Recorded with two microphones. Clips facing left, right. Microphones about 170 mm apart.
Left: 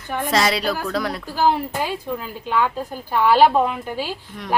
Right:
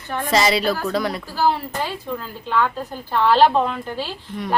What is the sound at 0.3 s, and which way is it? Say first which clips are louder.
Speech: right 2 dB; centre (ahead or behind).